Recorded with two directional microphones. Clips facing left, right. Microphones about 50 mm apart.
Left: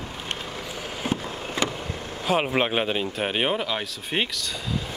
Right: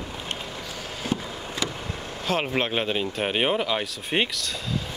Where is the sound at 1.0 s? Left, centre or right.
Left.